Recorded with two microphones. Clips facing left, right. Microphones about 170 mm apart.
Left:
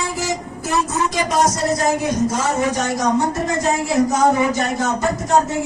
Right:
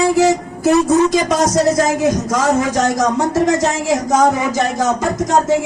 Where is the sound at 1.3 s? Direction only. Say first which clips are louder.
Right 4 dB; 90° right.